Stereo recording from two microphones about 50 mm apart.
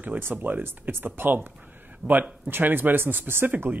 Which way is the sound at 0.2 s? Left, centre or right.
Right.